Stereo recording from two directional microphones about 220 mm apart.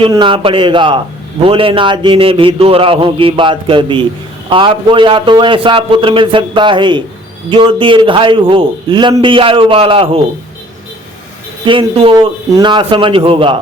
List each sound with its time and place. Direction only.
0.0 s a man's voice: 20° right (ahead or behind)
11.6 s a man's voice: 20° right (ahead or behind)